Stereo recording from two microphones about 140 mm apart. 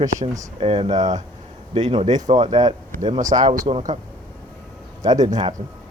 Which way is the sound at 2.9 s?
60° right (ahead or behind).